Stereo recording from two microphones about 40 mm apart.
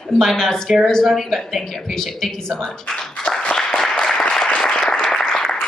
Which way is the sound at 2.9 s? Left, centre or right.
Centre.